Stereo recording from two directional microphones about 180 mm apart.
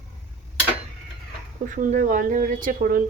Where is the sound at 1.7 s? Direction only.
45° right (ahead or behind).